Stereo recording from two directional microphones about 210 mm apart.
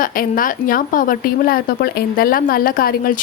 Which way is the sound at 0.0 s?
40° left (ahead or behind).